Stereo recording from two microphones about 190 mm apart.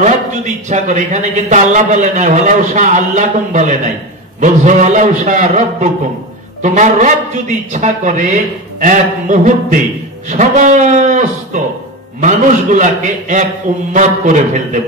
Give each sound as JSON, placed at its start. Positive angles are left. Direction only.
{"t": 0.7, "sound": "a man's voice", "side_deg": -40}